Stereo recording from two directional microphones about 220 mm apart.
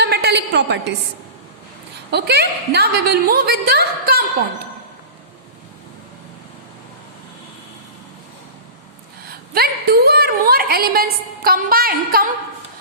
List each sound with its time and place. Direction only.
0.0 s a sound: 45° right (ahead or behind)
2.0 s a woman's voice: 50° right (ahead or behind)
9.6 s a woman's voice: 45° right (ahead or behind)